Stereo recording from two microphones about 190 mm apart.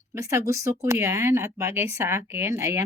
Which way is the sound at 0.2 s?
15° right (ahead or behind).